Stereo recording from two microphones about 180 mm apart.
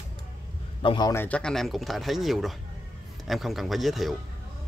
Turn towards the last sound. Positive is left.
turn(degrees=0)  # may be behind; listen again after turning